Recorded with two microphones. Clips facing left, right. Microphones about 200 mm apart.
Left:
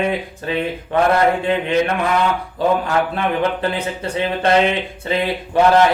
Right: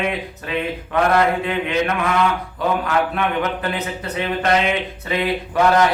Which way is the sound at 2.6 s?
30° left (ahead or behind).